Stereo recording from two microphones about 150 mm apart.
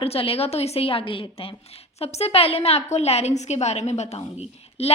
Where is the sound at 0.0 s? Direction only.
40° left (ahead or behind).